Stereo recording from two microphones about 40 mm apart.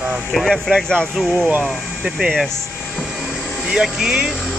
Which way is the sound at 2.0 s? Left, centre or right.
Centre.